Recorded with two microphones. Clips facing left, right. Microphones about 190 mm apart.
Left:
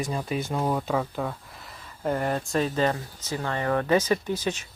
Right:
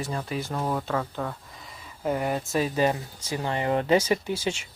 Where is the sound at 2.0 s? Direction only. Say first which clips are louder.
Even; 5° right (ahead or behind).